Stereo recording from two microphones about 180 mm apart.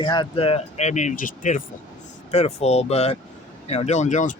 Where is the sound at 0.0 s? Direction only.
25° left (ahead or behind).